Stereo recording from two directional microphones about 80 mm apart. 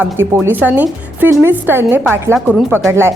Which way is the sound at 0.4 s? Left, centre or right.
Right.